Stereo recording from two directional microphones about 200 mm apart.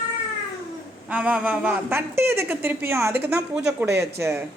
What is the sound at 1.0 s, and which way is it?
Speech, 5° right (ahead or behind).